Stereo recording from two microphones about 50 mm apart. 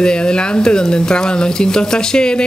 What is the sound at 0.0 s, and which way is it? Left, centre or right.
Speech, centre.